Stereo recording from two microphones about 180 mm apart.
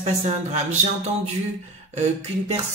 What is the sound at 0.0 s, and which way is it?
Speech, 35° right (ahead or behind).